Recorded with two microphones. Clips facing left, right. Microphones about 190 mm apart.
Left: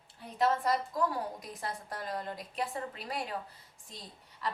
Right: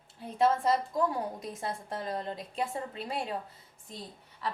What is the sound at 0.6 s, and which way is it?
A woman's voice, 25° right (ahead or behind).